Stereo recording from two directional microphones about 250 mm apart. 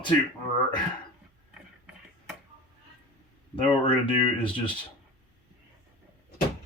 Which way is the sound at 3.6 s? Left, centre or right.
Left.